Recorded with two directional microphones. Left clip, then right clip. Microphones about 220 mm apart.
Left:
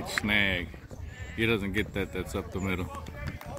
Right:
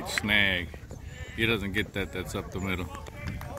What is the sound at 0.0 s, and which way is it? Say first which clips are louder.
Speech: right 2 dB; 10° left (ahead or behind).